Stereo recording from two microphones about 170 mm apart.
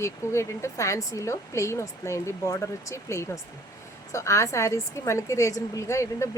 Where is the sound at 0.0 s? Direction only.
15° left (ahead or behind).